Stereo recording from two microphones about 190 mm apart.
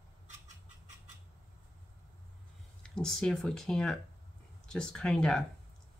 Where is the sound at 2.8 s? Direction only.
5° left (ahead or behind).